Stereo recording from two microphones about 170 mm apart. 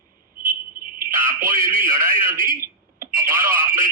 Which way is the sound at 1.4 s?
55° right (ahead or behind).